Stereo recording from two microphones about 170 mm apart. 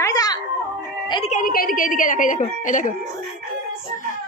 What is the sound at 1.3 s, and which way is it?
Speech, 50° left (ahead or behind).